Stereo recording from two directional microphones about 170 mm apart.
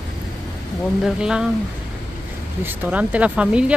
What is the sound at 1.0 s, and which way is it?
Speech, 5° right (ahead or behind).